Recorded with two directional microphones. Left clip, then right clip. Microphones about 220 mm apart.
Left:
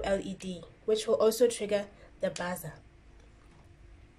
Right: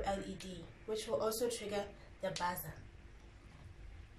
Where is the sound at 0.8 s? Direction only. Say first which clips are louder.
Left 11 dB; 45° left (ahead or behind).